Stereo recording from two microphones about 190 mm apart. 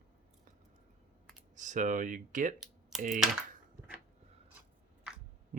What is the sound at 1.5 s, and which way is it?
Speech, 40° right (ahead or behind).